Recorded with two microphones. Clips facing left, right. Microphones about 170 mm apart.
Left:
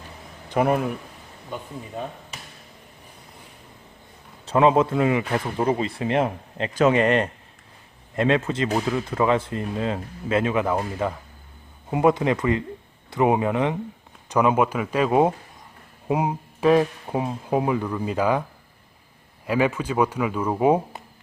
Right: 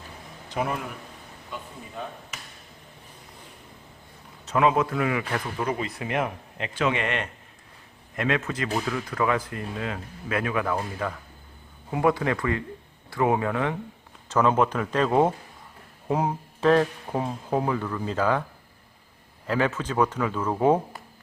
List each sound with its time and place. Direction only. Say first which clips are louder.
0.5 s speech: left 8 dB; 55° left (ahead or behind)
4.4 s speech: left 4 dB; 30° left (ahead or behind); by 18.4 s 15° left (ahead or behind)
19.5 s speech: left 3 dB; 10° left (ahead or behind)